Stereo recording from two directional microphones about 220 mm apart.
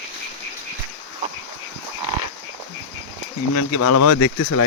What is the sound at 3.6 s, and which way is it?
Speech, 90° left.